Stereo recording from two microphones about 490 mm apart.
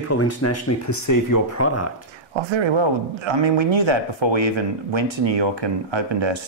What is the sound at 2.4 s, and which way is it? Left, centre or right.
Speech, right.